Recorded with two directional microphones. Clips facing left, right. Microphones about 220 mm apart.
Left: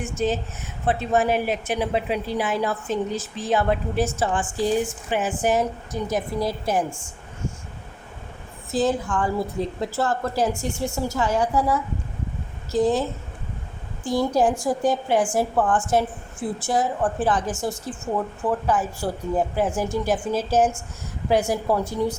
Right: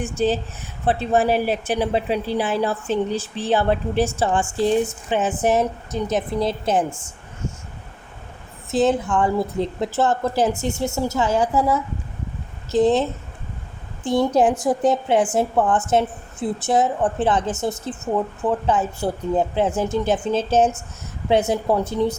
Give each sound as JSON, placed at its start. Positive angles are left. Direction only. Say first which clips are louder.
{"t": 0.0, "sound": "a woman's voice", "louder": "right 3 dB", "side_deg": -30}
{"t": 8.7, "sound": "a woman's voice", "louder": "right 4 dB", "side_deg": -25}